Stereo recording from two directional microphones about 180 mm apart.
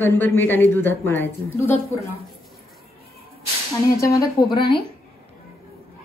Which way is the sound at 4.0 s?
20° left (ahead or behind).